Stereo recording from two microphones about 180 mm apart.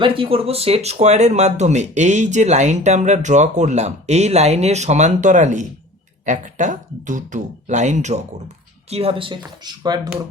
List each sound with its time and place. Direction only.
0.0 s speech: 30° right (ahead or behind)